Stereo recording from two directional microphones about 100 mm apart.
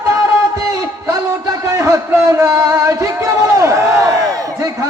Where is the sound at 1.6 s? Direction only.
30° right (ahead or behind).